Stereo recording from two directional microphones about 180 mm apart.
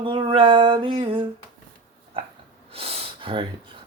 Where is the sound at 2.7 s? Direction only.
35° right (ahead or behind).